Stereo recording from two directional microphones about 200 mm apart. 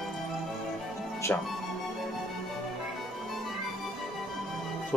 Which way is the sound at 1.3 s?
10° left (ahead or behind).